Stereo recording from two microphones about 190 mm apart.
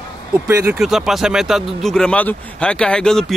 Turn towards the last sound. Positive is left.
turn(degrees=5)  # may be behind; listen again after turning